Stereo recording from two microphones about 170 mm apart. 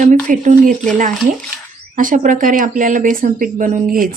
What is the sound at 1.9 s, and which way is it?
Speech, 50° right (ahead or behind).